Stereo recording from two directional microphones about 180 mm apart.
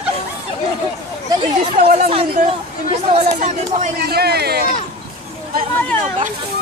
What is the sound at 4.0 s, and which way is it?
Speech, 60° right (ahead or behind).